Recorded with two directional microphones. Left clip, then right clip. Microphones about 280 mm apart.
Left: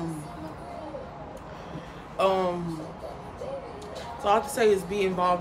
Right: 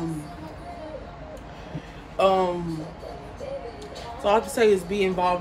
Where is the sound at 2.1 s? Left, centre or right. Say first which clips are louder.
Right 4 dB; centre.